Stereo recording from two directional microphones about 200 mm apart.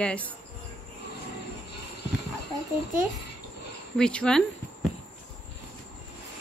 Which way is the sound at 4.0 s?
5° left (ahead or behind).